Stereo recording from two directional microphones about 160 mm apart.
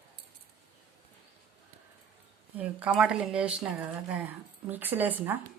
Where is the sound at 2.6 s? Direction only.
10° right (ahead or behind).